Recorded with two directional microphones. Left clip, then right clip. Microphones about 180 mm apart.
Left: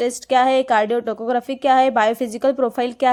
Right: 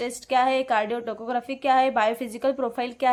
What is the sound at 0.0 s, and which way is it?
Speech, 35° left (ahead or behind).